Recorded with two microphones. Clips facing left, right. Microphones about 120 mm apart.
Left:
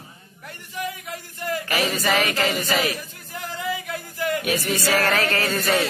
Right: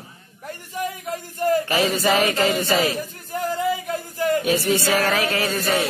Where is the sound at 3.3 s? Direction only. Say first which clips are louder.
Right 6 dB; 45° right (ahead or behind).